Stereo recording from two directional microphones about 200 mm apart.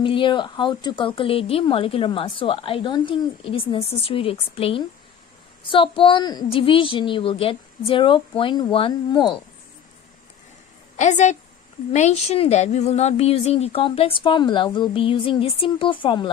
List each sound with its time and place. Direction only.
0.0 s speech: 25° left (ahead or behind)
11.0 s a woman's voice: 35° left (ahead or behind)